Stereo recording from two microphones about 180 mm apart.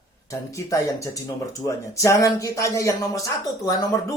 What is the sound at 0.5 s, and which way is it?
Speech, 15° left (ahead or behind).